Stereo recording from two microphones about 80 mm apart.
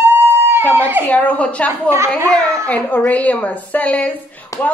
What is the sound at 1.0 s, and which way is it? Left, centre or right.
A woman's voice, centre.